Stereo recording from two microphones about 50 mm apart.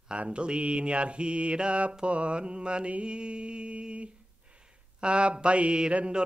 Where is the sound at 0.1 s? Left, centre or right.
Right.